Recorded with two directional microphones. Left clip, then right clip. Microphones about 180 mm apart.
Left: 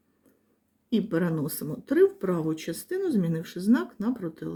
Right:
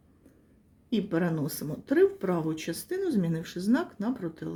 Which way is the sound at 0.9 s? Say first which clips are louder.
Left 2 dB; 25° left (ahead or behind).